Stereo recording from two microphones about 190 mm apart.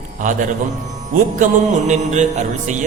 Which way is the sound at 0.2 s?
40° right (ahead or behind).